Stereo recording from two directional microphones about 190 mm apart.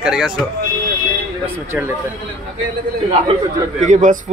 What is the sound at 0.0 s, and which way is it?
Speech, 5° right (ahead or behind).